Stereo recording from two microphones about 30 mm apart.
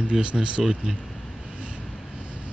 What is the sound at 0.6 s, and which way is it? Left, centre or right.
Speech, centre.